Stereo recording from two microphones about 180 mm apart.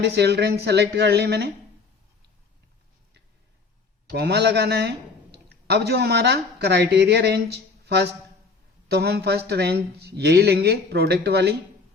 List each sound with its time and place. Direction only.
0.0 s speech: 65° right (ahead or behind)
4.1 s speech: 65° right (ahead or behind)
8.9 s speech: 60° right (ahead or behind)